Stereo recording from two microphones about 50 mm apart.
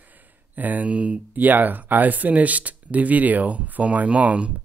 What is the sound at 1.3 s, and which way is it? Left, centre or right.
Speech, right.